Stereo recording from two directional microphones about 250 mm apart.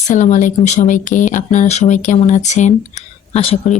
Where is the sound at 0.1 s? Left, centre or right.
Left.